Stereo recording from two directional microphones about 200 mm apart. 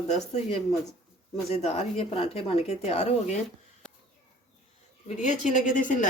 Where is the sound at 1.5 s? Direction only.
30° left (ahead or behind).